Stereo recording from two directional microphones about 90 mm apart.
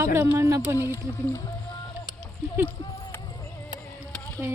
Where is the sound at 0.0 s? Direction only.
30° right (ahead or behind).